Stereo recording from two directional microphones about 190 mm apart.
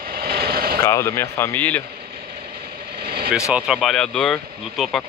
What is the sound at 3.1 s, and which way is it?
Vehicle, 55° right (ahead or behind).